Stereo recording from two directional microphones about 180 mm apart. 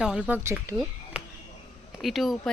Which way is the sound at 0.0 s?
5° right (ahead or behind).